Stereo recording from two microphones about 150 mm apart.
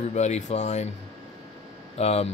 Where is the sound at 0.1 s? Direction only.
50° left (ahead or behind).